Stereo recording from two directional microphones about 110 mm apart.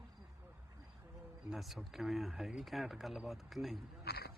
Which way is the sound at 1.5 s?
Centre (ahead or behind).